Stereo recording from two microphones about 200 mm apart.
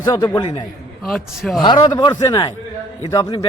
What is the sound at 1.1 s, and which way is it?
Speech, centre (ahead or behind).